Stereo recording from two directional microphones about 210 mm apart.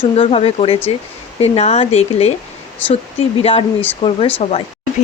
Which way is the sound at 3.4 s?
25° left (ahead or behind).